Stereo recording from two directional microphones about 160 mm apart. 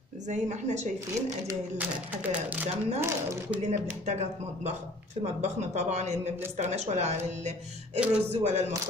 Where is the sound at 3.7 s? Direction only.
45° right (ahead or behind).